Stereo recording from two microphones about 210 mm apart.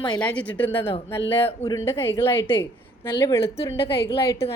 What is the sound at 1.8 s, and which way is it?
A woman's voice, 10° left (ahead or behind).